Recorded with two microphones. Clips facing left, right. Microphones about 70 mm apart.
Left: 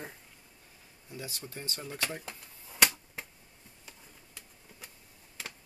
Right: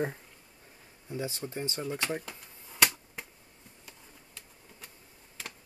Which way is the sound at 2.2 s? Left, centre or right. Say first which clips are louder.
Even; centre.